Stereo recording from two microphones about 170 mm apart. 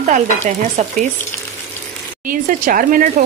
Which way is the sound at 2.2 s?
55° right (ahead or behind).